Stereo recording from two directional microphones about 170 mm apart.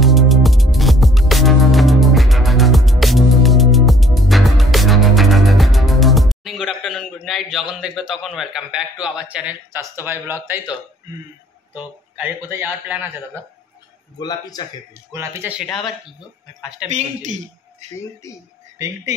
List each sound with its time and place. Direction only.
0.0 s music: centre (ahead or behind)
11.7 s a man's voice: 10° right (ahead or behind)
14.1 s a man's voice: 25° left (ahead or behind)
15.1 s a man's voice: 15° right (ahead or behind)
16.9 s a man's voice: 45° right (ahead or behind)